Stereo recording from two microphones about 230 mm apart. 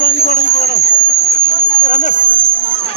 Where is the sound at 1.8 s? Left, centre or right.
Left.